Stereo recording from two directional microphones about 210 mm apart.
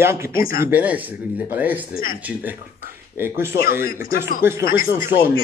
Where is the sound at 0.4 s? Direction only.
45° left (ahead or behind).